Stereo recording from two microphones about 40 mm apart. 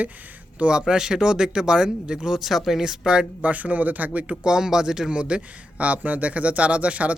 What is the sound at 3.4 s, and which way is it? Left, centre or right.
Speech, right.